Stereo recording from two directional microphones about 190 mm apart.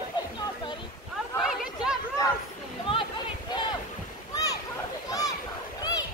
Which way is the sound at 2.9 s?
30° left (ahead or behind).